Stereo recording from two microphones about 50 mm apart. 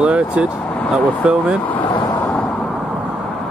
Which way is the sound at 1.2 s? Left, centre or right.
Right.